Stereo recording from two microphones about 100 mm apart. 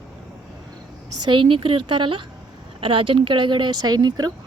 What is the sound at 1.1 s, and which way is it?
Speech, 55° right (ahead or behind).